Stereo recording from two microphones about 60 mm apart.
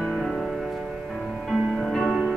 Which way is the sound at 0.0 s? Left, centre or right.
Centre.